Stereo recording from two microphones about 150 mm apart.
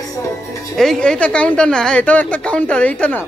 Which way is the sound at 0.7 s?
5° left (ahead or behind).